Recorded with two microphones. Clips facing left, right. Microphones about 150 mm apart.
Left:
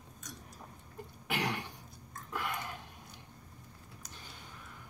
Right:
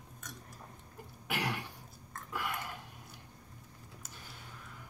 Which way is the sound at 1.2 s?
5° right (ahead or behind).